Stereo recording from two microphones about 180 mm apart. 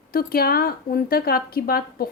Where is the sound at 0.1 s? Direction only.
55° left (ahead or behind).